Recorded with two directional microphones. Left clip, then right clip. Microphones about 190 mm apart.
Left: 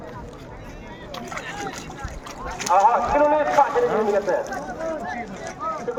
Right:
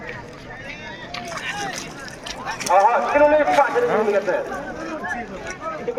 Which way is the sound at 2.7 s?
45° right (ahead or behind).